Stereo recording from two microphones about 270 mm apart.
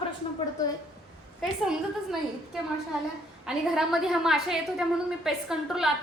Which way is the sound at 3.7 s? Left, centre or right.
Centre.